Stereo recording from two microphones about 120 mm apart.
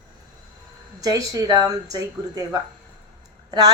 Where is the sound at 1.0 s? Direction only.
30° right (ahead or behind).